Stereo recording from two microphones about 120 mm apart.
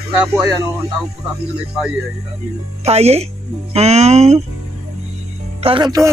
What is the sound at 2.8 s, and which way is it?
Speech, 60° right (ahead or behind).